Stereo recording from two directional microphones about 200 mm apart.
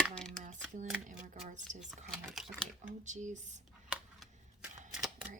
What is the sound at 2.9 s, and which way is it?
Speech, 35° right (ahead or behind).